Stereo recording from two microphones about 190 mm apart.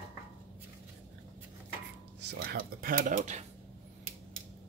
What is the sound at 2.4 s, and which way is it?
Speech, 50° right (ahead or behind).